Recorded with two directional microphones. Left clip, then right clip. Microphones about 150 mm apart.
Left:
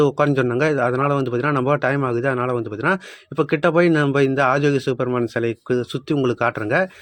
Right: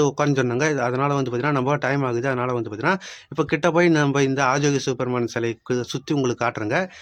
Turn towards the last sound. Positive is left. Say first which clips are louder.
# left 4 dB
turn(degrees=10)  # may be behind; listen again after turning